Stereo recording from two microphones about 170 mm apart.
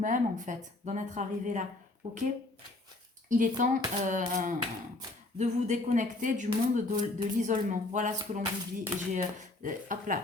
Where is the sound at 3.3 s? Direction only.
50° right (ahead or behind).